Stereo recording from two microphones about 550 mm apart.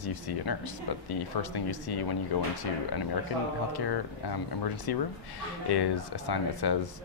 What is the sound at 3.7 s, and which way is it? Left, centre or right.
Speech, left.